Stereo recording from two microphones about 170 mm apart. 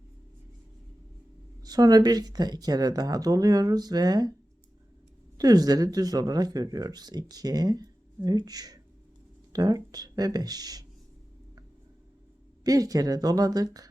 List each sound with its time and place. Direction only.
1.6 s speech: 20° right (ahead or behind)
5.4 s speech: 20° right (ahead or behind)
12.6 s speech: 20° right (ahead or behind)